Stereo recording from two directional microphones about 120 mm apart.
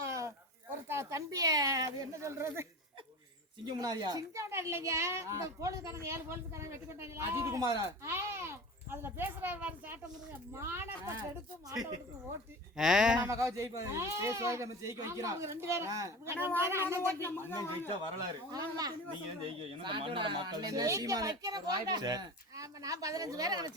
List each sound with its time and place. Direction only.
0.0 s a sound: 25° right (ahead or behind)
0.9 s speech: 25° right (ahead or behind)
3.7 s speech: 35° right (ahead or behind)
4.4 s a woman's voice: 25° right (ahead or behind)
11.7 s speech: 35° right (ahead or behind)
12.7 s speech: 5° right (ahead or behind)
13.2 s a woman's voice: 25° right (ahead or behind)
17.2 s speech: 20° left (ahead or behind)
18.5 s speech: 35° right (ahead or behind)
19.8 s speech: 45° right (ahead or behind)